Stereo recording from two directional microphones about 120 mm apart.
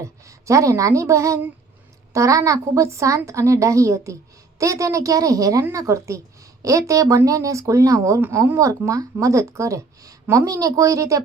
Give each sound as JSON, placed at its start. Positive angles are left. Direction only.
{"t": 0.0, "sound": "speech", "side_deg": -25}